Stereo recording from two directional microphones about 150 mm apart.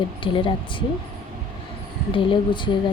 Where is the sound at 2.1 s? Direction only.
35° left (ahead or behind).